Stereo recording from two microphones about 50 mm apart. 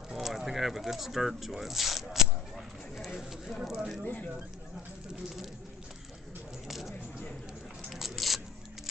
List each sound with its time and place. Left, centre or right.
0.1 s zipper: centre
3.2 s speech: centre
4.0 s speech: left
6.7 s a sound: centre
7.9 s biting: centre